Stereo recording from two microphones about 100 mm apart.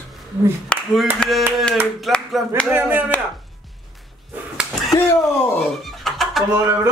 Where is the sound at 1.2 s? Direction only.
10° left (ahead or behind).